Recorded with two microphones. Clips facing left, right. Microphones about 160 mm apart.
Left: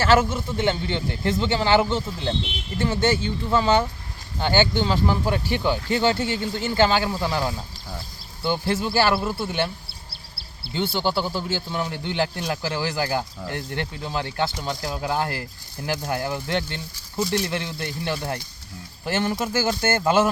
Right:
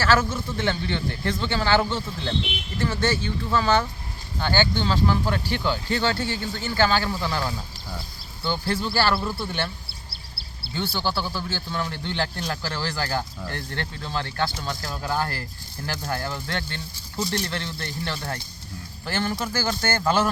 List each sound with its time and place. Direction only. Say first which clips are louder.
0.0 s speech: left 3 dB; 25° left (ahead or behind)
10.9 s speech: left 3 dB; 15° left (ahead or behind)